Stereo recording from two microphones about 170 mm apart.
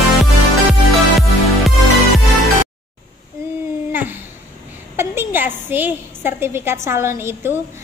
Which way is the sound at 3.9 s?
10° right (ahead or behind).